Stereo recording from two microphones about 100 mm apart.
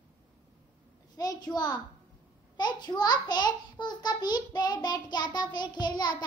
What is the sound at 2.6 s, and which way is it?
A child's voice, 45° left (ahead or behind).